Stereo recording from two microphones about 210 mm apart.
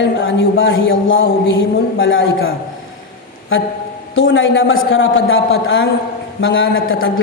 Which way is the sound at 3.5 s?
70° left (ahead or behind).